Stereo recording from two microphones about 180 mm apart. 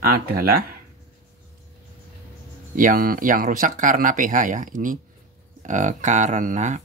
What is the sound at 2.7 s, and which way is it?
Speech, 50° right (ahead or behind).